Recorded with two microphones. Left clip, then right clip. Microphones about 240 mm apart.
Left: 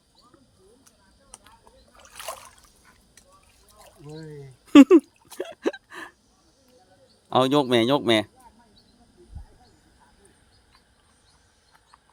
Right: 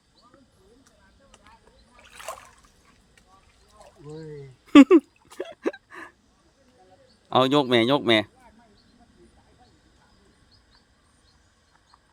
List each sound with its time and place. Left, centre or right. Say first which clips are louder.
2.1 s water: left 1 dB; left
4.0 s speech: right 2 dB; left
4.6 s a sound: left 1 dB; centre
7.3 s speech: even; centre